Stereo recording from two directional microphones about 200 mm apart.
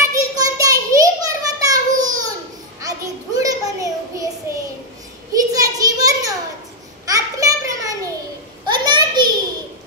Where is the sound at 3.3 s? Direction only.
15° right (ahead or behind).